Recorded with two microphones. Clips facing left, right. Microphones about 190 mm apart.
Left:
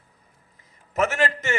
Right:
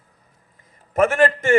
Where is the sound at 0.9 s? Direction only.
50° right (ahead or behind).